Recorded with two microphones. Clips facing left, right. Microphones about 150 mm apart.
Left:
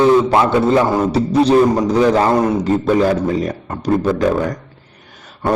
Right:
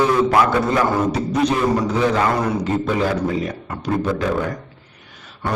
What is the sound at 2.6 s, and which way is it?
A man's voice, 40° left (ahead or behind).